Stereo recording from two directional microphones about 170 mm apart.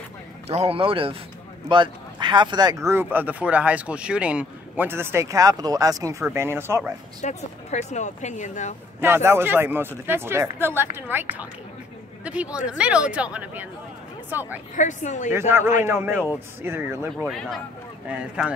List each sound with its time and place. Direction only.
0.5 s a man's voice: 35° right (ahead or behind); by 6.9 s 15° right (ahead or behind)
7.2 s speech: 45° left (ahead or behind)
9.0 s speech: 15° right (ahead or behind)
14.8 s speech: 45° left (ahead or behind)
15.3 s speech: 15° right (ahead or behind)
17.3 s speech: centre (ahead or behind)